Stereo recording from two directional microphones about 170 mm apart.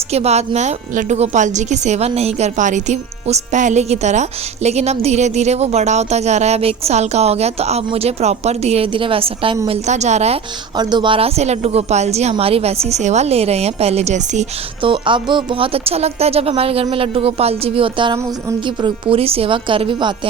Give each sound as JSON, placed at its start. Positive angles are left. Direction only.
{"t": 0.1, "sound": "a woman's voice", "side_deg": -40}
{"t": 10.8, "sound": "a woman's voice", "side_deg": -25}
{"t": 14.8, "sound": "a woman's voice", "side_deg": -30}